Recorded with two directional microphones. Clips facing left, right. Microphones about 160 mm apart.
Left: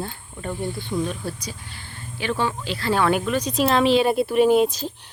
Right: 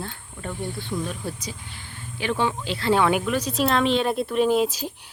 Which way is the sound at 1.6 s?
20° right (ahead or behind).